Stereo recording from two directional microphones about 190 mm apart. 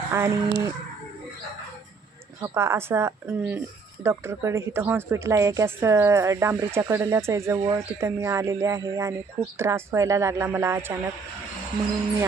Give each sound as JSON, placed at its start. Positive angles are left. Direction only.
{"t": 0.1, "sound": "a woman's voice", "side_deg": -15}
{"t": 2.4, "sound": "a woman's voice", "side_deg": -15}